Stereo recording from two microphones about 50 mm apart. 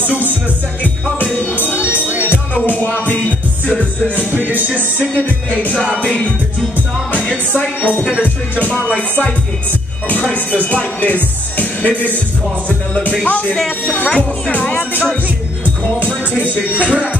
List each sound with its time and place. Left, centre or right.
0.8 s music: left
1.9 s music: right
2.6 s music: left
5.9 s music: left
7.5 s music: left
8.2 s music: right
8.7 s music: left
10.3 s music: left
13.2 s music: left
16.3 s speech: right